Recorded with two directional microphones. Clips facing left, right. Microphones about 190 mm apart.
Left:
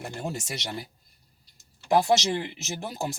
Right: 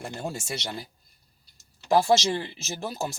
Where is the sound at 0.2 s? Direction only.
20° left (ahead or behind).